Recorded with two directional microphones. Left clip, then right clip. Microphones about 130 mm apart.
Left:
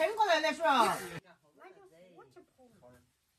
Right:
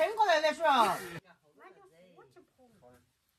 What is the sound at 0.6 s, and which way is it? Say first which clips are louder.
Speech: even; 35° right (ahead or behind).